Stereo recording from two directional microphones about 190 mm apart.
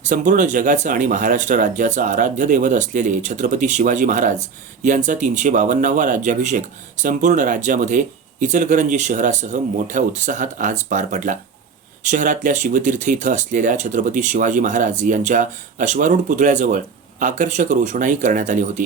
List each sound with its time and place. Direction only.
0.1 s speech: 40° right (ahead or behind)